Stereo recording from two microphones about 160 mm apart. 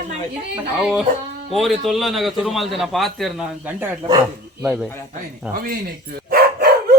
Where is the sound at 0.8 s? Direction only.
Centre (ahead or behind).